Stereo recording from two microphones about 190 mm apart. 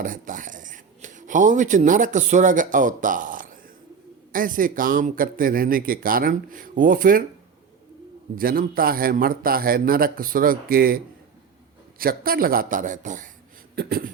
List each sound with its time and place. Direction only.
0.0 s speech: 45° right (ahead or behind)
8.4 s speech: 50° right (ahead or behind)
13.7 s speech: 55° right (ahead or behind)